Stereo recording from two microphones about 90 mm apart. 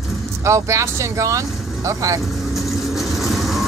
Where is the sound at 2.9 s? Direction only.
Centre (ahead or behind).